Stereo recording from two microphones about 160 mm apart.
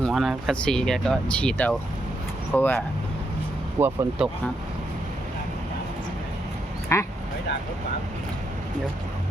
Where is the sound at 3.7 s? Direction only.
20° right (ahead or behind).